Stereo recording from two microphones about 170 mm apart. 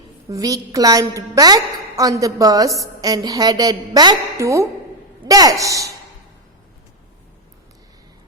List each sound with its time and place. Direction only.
0.3 s a woman's voice: 20° right (ahead or behind)